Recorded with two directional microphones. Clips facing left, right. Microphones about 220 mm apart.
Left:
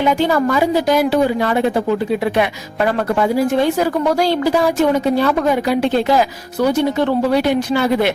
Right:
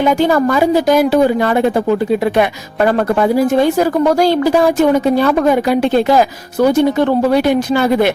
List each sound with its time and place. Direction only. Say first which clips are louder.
0.0 s a woman's voice: right 3 dB; 45° right (ahead or behind)